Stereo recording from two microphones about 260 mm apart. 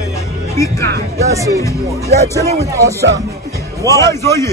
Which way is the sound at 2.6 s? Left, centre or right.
Centre.